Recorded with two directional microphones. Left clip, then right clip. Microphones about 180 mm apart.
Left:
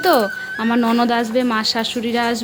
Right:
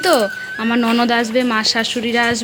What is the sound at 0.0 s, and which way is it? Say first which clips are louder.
Speech: right 1 dB; 10° left (ahead or behind).